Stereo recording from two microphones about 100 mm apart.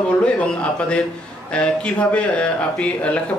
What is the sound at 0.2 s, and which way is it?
Speech, 10° left (ahead or behind).